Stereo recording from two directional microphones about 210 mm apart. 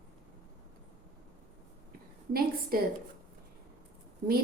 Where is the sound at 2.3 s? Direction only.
45° right (ahead or behind).